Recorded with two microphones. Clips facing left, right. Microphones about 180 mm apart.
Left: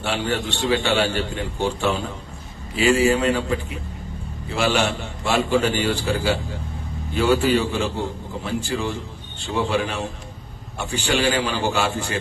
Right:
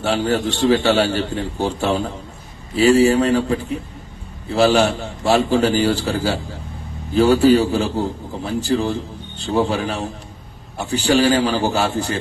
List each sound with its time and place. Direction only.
0.0 s a man's voice: 40° right (ahead or behind)
4.6 s a man's voice: 35° right (ahead or behind)